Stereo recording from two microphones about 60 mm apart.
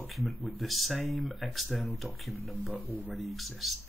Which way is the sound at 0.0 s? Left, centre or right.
Centre.